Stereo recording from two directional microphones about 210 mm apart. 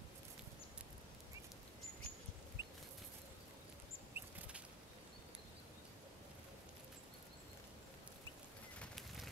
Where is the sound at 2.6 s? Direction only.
15° right (ahead or behind).